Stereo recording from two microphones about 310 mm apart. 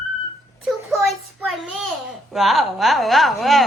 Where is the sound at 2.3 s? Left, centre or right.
Centre.